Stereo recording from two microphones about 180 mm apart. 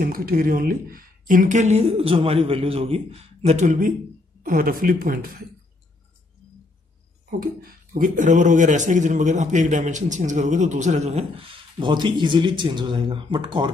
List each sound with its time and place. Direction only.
0.0 s a man's voice: 55° right (ahead or behind)
7.9 s a man's voice: 45° right (ahead or behind); by 13.7 s 25° right (ahead or behind)